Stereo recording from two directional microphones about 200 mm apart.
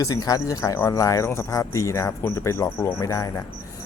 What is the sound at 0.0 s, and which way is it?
Speech, 20° left (ahead or behind).